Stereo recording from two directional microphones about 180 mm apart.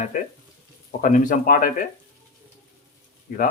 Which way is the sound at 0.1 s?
50° left (ahead or behind).